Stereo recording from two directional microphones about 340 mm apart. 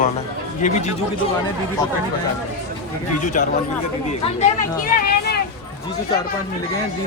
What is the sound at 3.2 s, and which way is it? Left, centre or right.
Speech, left.